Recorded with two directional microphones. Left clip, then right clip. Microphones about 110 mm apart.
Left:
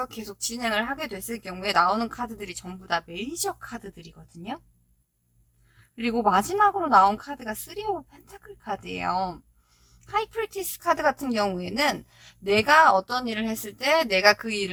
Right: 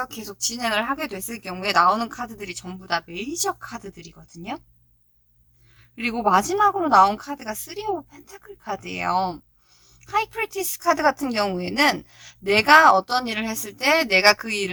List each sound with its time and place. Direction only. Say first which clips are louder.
0.0 s a woman's voice: right 4 dB; 45° right (ahead or behind)
6.0 s a woman's voice: right 3 dB; 35° right (ahead or behind)